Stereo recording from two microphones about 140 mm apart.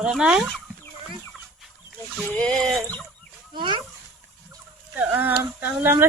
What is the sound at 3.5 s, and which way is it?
Speech, 35° right (ahead or behind).